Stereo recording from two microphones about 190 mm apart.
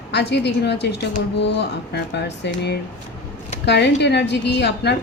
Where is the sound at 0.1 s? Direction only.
60° left (ahead or behind).